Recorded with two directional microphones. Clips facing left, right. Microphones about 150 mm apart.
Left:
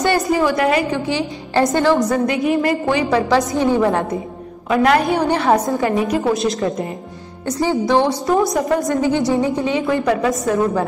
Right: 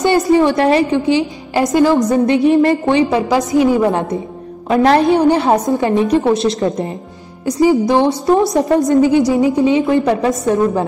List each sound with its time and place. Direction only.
0.0 s a woman's voice: 20° right (ahead or behind)
4.6 s a woman's voice: 30° right (ahead or behind)